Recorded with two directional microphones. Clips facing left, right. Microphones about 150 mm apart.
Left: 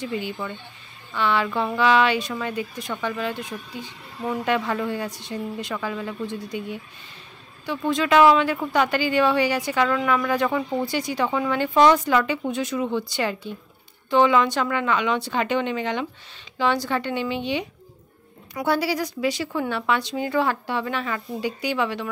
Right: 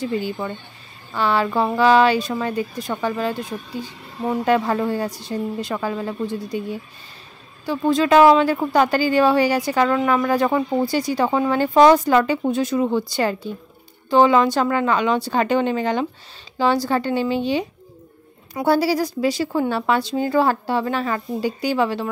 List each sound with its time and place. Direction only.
0.0 s speech: 35° right (ahead or behind)